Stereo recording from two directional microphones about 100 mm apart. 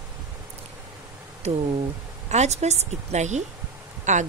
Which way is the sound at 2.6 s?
90° right.